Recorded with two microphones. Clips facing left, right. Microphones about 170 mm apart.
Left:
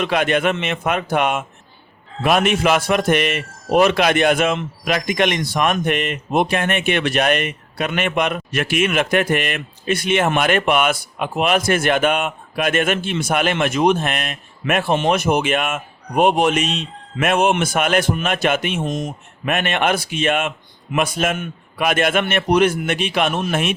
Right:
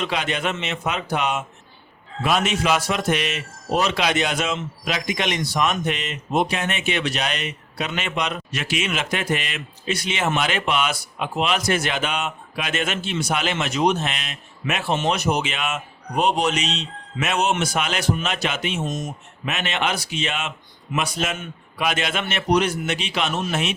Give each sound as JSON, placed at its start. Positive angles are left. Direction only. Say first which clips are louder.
{"t": 0.0, "sound": "a man's voice", "louder": "left 7 dB", "side_deg": 55}